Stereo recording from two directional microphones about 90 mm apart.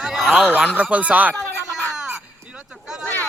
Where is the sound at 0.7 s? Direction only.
15° right (ahead or behind).